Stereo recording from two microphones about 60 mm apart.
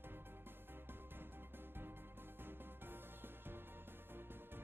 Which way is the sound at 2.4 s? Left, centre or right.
Right.